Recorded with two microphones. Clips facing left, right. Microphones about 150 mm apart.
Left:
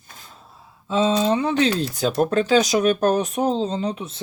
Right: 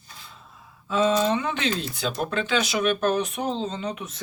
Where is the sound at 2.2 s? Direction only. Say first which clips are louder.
Left 8 dB; 40° left (ahead or behind).